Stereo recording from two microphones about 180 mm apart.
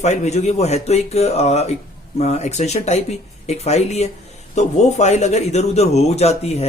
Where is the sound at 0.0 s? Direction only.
40° left (ahead or behind).